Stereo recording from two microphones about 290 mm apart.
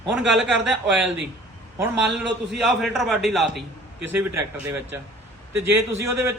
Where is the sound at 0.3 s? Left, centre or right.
Right.